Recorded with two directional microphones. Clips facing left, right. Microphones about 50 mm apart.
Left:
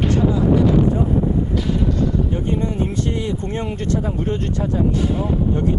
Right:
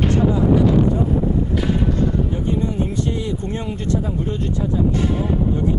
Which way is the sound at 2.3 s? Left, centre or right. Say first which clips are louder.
Even; left.